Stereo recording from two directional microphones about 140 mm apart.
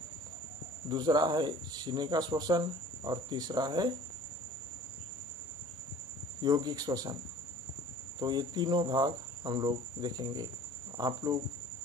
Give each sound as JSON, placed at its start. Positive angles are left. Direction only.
{"t": 0.8, "sound": "speech", "side_deg": -30}
{"t": 6.4, "sound": "cricket", "side_deg": -30}
{"t": 8.2, "sound": "speech", "side_deg": -30}
{"t": 11.0, "sound": "cricket", "side_deg": -30}